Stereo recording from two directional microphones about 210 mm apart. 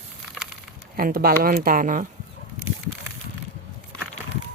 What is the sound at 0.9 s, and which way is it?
Speech, 45° right (ahead or behind).